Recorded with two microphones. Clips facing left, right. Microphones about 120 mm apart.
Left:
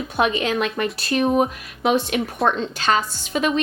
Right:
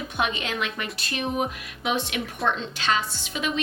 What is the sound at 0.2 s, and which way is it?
A woman's voice, 40° left (ahead or behind).